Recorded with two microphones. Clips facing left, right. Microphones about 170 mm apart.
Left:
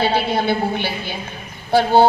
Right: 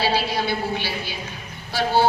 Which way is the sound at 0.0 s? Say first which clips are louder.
Left 4 dB; 55° left (ahead or behind).